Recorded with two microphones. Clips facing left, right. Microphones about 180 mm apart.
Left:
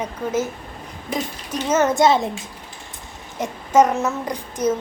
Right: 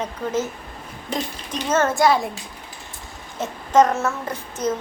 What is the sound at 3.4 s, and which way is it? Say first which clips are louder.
A child's voice: left 1 dB; 10° left (ahead or behind).